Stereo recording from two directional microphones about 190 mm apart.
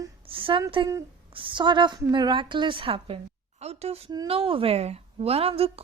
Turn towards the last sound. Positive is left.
turn(degrees=-30)  # may be behind; listen again after turning